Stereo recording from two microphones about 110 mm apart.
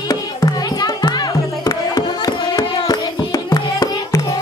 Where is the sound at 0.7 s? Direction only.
40° left (ahead or behind).